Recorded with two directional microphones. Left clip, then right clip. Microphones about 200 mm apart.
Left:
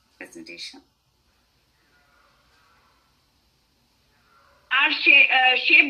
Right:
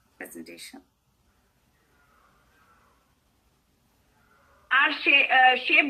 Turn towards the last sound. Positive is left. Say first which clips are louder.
# left 2 dB
turn(degrees=-45)  # may be behind; listen again after turning